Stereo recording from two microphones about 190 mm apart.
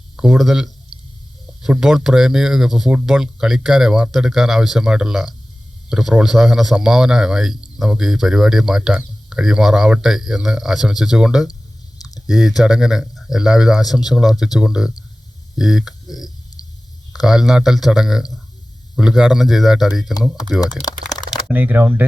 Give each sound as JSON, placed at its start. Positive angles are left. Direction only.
{"t": 0.2, "sound": "speech", "side_deg": 0}
{"t": 11.9, "sound": "chewing", "side_deg": 20}
{"t": 12.2, "sound": "speech", "side_deg": 0}
{"t": 21.5, "sound": "speech", "side_deg": -10}